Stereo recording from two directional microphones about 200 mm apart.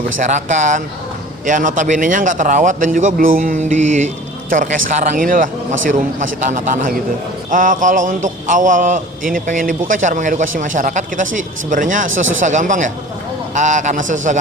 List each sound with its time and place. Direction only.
0.3 s a man's voice: 35° right (ahead or behind)
12.1 s speech: 75° right (ahead or behind)
12.4 s a man's voice: 40° right (ahead or behind)